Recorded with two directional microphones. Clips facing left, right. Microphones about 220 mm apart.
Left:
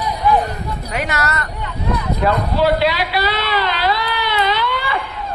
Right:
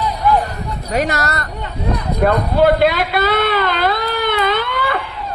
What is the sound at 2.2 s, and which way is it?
Speech, 50° right (ahead or behind).